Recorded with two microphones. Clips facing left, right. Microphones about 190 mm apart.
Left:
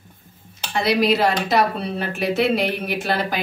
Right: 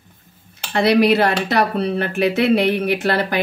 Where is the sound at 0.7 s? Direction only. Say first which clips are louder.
Right 4 dB; 60° right (ahead or behind).